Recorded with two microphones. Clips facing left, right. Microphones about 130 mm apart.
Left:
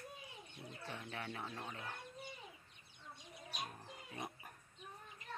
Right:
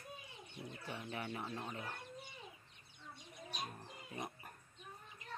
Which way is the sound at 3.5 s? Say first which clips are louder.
Right 1 dB; centre (ahead or behind).